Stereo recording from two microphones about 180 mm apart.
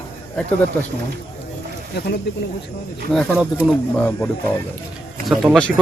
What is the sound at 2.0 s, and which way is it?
Speech, 65° left (ahead or behind).